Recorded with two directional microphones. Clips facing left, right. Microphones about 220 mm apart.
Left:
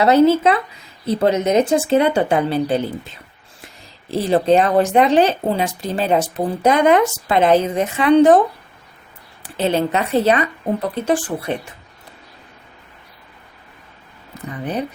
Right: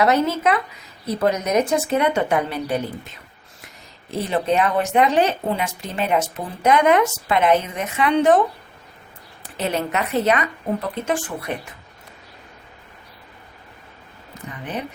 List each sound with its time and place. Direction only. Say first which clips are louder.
0.0 s speech: left 6 dB; 30° left (ahead or behind)
4.1 s speech: left 6 dB; 30° left (ahead or behind)
9.4 s speech: left 6 dB; 30° left (ahead or behind)
14.6 s speech: left 6 dB; 35° left (ahead or behind)